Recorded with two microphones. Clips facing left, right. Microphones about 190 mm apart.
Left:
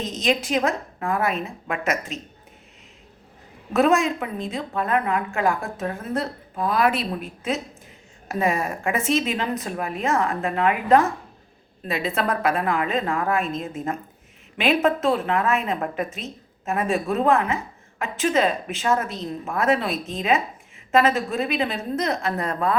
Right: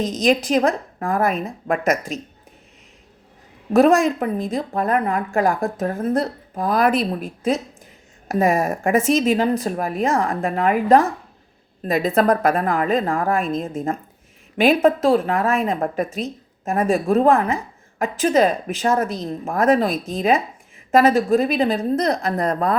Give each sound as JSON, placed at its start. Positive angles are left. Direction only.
{"t": 0.2, "sound": "a woman's voice", "side_deg": -40}
{"t": 3.7, "sound": "a woman's voice", "side_deg": -35}